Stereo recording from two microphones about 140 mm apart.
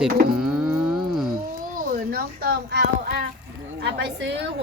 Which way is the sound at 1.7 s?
85° right.